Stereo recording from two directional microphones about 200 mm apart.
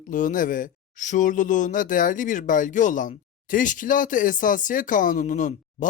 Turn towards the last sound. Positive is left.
turn(degrees=40)  # may be behind; listen again after turning